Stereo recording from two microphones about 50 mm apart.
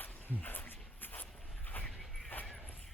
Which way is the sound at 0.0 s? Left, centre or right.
Left.